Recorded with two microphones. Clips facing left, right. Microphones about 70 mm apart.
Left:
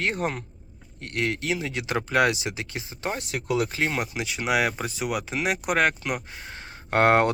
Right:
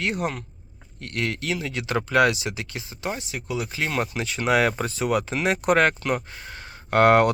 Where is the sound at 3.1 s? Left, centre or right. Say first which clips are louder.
Left 4 dB; left.